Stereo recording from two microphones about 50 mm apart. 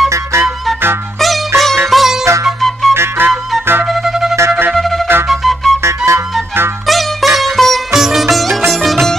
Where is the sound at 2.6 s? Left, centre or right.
Centre.